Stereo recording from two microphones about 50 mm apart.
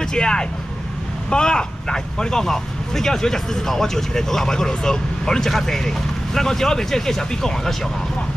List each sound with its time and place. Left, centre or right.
0.0 s speech: centre